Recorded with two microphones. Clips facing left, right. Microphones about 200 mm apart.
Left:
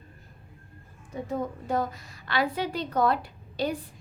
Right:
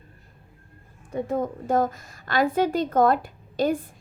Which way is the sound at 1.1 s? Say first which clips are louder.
Right 5 dB; 55° right (ahead or behind).